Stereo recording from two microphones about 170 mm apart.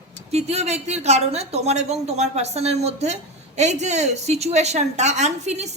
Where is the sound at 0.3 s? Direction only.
40° right (ahead or behind).